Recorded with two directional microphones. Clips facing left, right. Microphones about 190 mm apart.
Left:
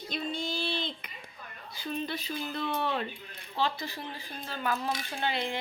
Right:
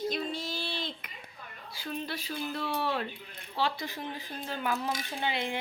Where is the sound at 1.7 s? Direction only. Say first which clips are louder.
Left 2 dB; 5° right (ahead or behind).